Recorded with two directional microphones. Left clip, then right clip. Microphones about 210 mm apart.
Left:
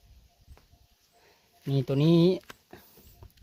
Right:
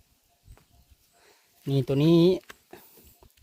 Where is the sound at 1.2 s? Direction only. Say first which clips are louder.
Right 3 dB; 15° right (ahead or behind).